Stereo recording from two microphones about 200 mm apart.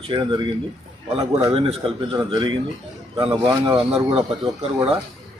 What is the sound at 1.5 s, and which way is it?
Speech, 30° right (ahead or behind).